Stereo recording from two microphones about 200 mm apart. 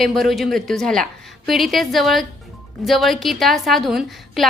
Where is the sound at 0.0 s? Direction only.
Centre (ahead or behind).